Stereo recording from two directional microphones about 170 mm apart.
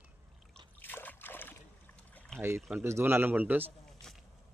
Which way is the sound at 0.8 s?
10° left (ahead or behind).